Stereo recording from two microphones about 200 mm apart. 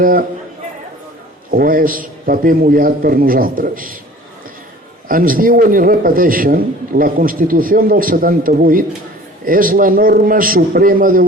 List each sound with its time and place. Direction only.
0.0 s a man's voice: 45° right (ahead or behind)
1.5 s a man's voice: 45° right (ahead or behind)
5.0 s a man's voice: 45° right (ahead or behind)